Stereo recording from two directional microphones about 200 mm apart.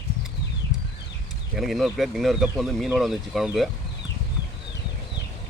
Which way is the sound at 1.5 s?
Centre (ahead or behind).